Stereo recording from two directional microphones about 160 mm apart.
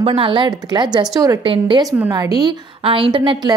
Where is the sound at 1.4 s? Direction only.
30° right (ahead or behind).